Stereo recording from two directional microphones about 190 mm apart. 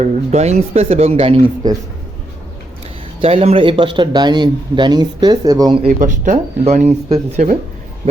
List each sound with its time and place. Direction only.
0.0 s speech: 35° right (ahead or behind)
3.2 s speech: 30° right (ahead or behind)
5.9 s a man's voice: 40° right (ahead or behind)